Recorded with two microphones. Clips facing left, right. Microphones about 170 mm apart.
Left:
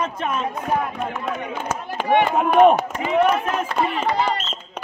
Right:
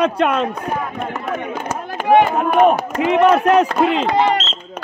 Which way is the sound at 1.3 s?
50° right (ahead or behind).